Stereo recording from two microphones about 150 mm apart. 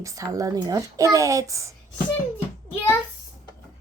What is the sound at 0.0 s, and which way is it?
A woman's voice, 25° right (ahead or behind).